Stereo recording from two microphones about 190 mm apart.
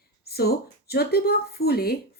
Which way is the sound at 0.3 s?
55° left (ahead or behind).